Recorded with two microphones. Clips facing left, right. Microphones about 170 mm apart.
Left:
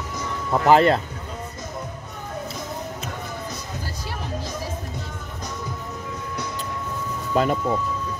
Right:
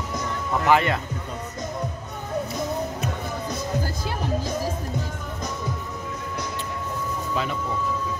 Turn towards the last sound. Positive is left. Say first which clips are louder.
# left 7 dB
turn(degrees=45)  # may be behind; listen again after turning